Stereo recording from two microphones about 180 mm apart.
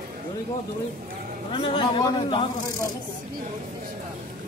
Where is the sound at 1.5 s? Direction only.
25° left (ahead or behind).